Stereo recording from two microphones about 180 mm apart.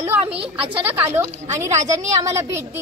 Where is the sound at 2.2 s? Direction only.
15° right (ahead or behind).